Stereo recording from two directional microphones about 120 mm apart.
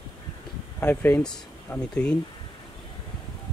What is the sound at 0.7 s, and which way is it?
Speech, 15° left (ahead or behind).